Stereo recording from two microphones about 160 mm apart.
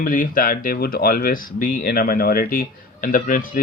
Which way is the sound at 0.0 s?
60° left (ahead or behind).